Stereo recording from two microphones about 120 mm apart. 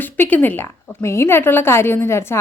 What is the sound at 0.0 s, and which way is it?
A woman's voice, 15° left (ahead or behind).